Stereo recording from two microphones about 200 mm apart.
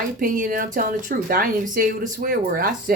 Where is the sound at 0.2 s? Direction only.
40° right (ahead or behind).